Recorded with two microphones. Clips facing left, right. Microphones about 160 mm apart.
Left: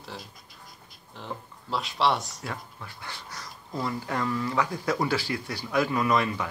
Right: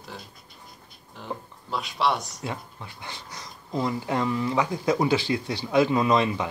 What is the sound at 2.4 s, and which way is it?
Speech, 20° right (ahead or behind).